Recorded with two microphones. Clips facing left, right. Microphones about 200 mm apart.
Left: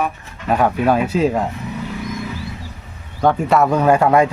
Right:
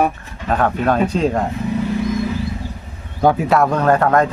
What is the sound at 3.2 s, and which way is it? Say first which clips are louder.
Speech: right 1 dB; 5° right (ahead or behind).